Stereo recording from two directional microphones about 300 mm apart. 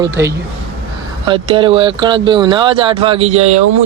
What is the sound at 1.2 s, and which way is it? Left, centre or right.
Speech, centre.